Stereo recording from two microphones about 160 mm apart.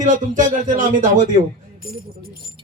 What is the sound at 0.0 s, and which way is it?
Speech, 50° right (ahead or behind).